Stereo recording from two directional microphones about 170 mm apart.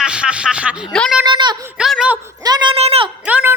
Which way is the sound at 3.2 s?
10° right (ahead or behind).